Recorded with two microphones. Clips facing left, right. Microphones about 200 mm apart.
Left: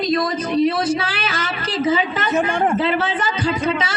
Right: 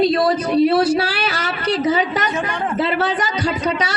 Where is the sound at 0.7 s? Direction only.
65° right (ahead or behind).